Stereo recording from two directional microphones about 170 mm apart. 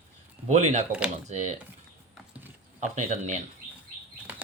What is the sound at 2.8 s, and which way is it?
Speech, 40° right (ahead or behind).